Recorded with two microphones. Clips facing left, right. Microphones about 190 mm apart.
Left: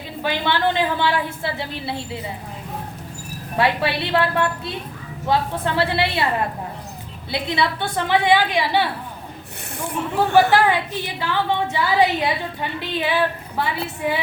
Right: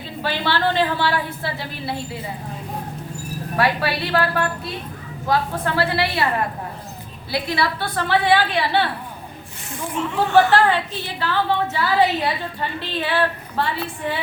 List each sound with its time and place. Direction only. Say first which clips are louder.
0.2 s a woman's voice: left 1 dB; 15° left (ahead or behind)
3.6 s a woman's voice: left 1 dB; 25° left (ahead or behind)
7.3 s a woman's voice: even; 25° left (ahead or behind)
9.7 s speech: left 1 dB; 70° left (ahead or behind)
10.5 s a woman's voice: even; 15° left (ahead or behind)